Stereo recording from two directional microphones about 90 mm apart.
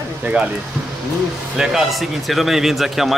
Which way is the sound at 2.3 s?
Centre (ahead or behind).